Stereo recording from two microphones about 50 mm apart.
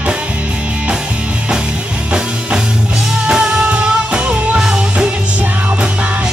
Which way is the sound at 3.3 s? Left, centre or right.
Centre.